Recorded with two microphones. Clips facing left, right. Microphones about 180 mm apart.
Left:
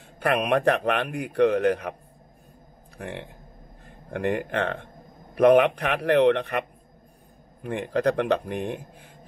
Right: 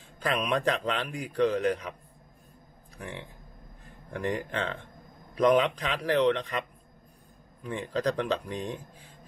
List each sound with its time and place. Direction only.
0.2 s a man's voice: 60° left (ahead or behind)
3.0 s a man's voice: 60° left (ahead or behind)
7.6 s a man's voice: 60° left (ahead or behind)